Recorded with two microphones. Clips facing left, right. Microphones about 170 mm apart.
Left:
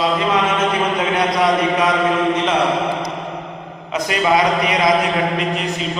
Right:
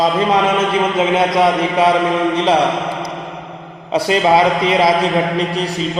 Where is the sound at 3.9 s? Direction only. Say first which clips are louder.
Right 4 dB; 30° right (ahead or behind).